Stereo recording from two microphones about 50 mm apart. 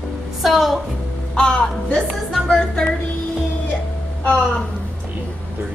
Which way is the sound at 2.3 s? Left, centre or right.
Centre.